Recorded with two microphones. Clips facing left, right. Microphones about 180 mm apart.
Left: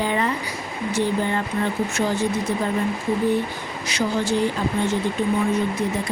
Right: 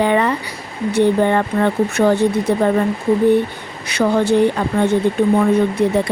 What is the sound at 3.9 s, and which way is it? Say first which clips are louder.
Speech: right 8 dB; 60° right (ahead or behind).